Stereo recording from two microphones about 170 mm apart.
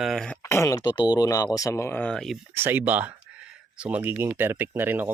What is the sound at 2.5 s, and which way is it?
Speech, 10° right (ahead or behind).